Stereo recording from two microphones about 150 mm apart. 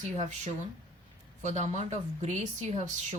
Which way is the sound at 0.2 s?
50° right (ahead or behind).